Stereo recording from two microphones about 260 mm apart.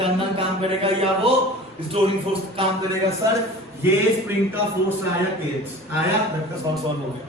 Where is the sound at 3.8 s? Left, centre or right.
Centre.